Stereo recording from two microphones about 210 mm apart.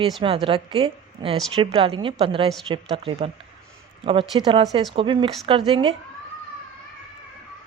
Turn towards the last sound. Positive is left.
turn(degrees=-25)  # may be behind; listen again after turning